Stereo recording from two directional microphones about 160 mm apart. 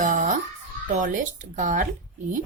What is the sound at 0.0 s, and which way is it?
Music, 50° right (ahead or behind).